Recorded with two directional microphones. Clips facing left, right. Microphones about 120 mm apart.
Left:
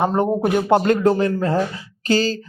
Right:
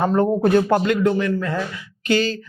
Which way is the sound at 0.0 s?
20° left (ahead or behind).